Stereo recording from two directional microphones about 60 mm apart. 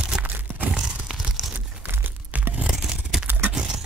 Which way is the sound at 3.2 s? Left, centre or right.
Right.